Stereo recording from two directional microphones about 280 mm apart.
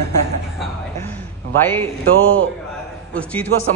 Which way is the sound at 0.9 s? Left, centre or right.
Centre.